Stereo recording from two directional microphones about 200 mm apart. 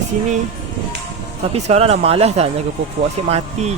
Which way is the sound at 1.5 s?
30° right (ahead or behind).